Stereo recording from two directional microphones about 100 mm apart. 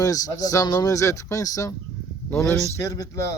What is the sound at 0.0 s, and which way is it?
A man's voice, 35° left (ahead or behind).